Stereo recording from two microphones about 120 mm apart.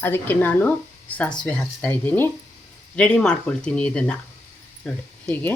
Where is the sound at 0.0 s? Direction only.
20° left (ahead or behind).